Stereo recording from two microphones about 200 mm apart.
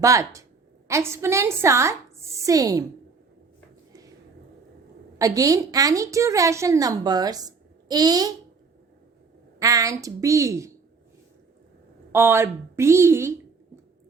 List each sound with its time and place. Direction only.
0.0 s a woman's voice: 15° right (ahead or behind)
5.1 s a woman's voice: 15° right (ahead or behind)
9.6 s a woman's voice: 15° right (ahead or behind)
12.1 s a woman's voice: 10° right (ahead or behind)